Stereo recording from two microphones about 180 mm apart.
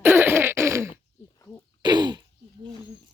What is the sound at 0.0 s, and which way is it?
Throat clearing, 10° right (ahead or behind).